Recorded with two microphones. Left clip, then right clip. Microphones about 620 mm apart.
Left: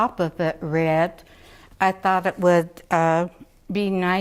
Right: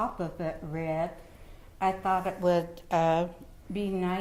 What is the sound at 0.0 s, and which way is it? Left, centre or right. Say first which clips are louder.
A woman's voice: left 10 dB; left.